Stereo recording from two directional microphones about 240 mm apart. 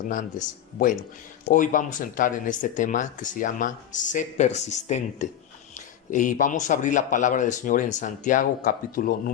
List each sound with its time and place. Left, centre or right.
0.0 s speech: left